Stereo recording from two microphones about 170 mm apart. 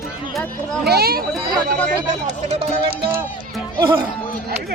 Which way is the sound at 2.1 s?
40° right (ahead or behind).